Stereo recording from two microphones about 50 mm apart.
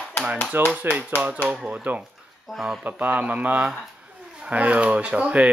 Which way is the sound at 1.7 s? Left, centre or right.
Right.